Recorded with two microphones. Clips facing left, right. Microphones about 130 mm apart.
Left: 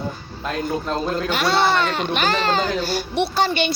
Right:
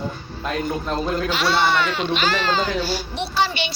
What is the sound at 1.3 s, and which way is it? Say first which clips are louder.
Speech: left 2 dB; 50° left (ahead or behind).